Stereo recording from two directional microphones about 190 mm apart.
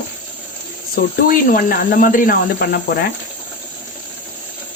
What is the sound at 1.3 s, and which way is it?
Speech, 50° left (ahead or behind).